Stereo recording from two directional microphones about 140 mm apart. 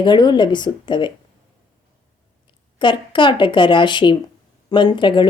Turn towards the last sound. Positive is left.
turn(degrees=35)  # may be behind; listen again after turning